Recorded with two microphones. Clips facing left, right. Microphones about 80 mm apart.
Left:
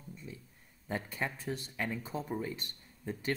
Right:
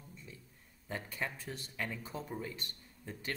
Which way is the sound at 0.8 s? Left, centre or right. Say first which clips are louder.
Left 3 dB; left.